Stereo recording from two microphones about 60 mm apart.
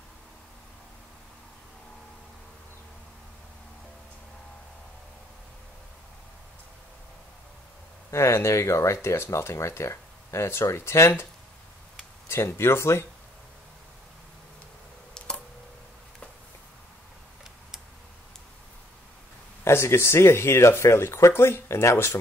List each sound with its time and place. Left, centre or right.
8.1 s speech: left
12.3 s speech: left
15.1 s tick: centre
19.6 s speech: left